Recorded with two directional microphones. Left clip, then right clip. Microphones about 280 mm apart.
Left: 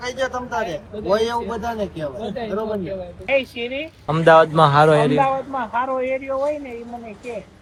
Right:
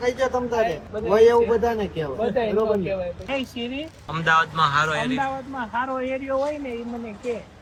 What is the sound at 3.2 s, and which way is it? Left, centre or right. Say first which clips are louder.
Speech: left 7 dB; right.